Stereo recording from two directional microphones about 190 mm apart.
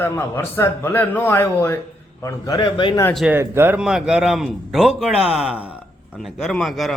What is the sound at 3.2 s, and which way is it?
Speech, 10° right (ahead or behind).